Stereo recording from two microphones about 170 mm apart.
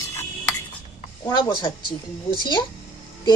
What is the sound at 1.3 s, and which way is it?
Speech, 25° left (ahead or behind).